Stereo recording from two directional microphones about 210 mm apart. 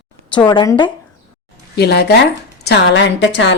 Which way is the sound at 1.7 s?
50° left (ahead or behind).